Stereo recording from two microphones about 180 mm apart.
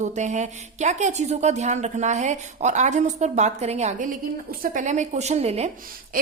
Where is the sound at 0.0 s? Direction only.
40° right (ahead or behind).